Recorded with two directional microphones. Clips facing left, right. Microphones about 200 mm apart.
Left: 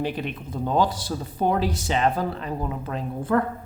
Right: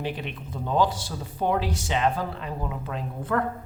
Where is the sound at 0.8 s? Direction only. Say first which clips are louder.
Even; 35° left (ahead or behind).